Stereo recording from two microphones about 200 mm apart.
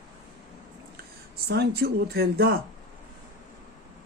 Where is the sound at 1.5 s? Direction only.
55° right (ahead or behind).